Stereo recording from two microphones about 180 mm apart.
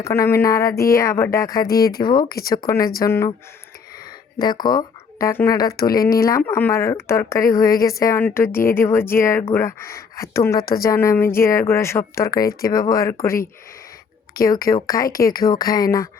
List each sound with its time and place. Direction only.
0.0 s speech: 15° left (ahead or behind)
2.3 s speech: 55° left (ahead or behind)
2.6 s speech: 20° left (ahead or behind)
4.4 s speech: 25° left (ahead or behind)
14.4 s speech: 55° left (ahead or behind)
14.8 s speech: 20° left (ahead or behind)